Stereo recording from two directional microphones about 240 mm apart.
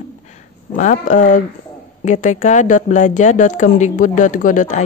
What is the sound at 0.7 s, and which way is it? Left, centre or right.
Speech, left.